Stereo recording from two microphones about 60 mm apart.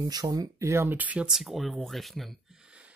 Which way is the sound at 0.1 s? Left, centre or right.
Right.